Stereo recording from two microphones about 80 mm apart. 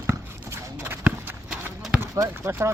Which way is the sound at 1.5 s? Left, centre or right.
Centre.